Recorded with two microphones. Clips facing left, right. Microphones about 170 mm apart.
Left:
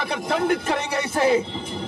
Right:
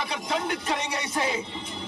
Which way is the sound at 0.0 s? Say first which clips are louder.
Left 6 dB; 55° left (ahead or behind).